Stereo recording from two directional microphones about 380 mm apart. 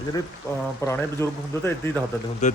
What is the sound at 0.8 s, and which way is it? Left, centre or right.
Speech, centre.